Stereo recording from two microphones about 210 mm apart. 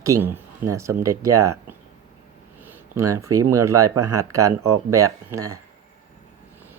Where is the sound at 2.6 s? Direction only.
15° right (ahead or behind).